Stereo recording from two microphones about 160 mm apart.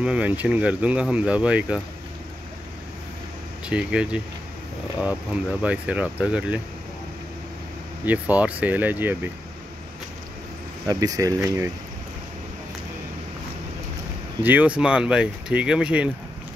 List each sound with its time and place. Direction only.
0.0 s speech: 5° right (ahead or behind)
3.6 s speech: 5° right (ahead or behind)
8.0 s speech: 10° right (ahead or behind)
10.9 s speech: 20° right (ahead or behind)
14.4 s speech: 10° right (ahead or behind)